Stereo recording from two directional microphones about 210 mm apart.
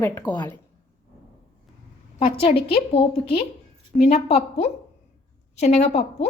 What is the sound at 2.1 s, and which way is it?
A woman's voice, 25° left (ahead or behind).